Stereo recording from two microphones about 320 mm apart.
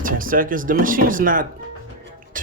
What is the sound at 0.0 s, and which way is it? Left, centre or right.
Speech, right.